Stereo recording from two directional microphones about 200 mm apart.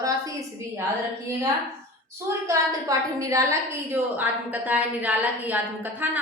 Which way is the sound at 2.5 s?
15° right (ahead or behind).